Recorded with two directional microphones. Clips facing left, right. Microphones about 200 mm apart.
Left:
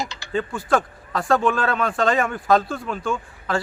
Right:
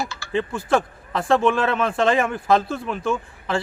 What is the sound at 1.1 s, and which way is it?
Speech, 25° right (ahead or behind).